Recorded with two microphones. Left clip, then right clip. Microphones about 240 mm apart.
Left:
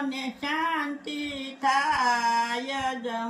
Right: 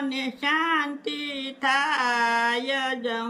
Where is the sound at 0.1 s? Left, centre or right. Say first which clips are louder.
Right 5 dB; centre.